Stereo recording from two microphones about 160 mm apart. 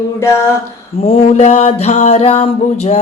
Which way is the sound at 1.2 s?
45° left (ahead or behind).